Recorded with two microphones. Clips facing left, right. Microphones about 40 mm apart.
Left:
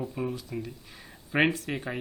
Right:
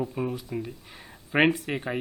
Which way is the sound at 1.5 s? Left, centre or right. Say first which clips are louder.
Right 3 dB; right.